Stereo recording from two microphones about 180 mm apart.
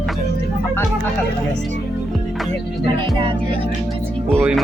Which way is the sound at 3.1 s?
30° right (ahead or behind).